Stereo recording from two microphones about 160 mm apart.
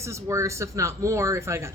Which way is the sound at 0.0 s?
20° right (ahead or behind).